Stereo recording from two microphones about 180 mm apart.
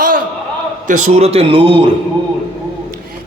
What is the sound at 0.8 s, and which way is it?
A man's voice, 35° right (ahead or behind).